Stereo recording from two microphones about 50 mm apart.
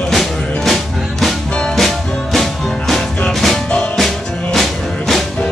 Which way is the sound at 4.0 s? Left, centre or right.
Centre.